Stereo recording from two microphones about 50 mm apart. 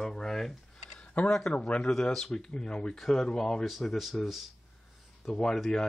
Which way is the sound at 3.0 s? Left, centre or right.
Centre.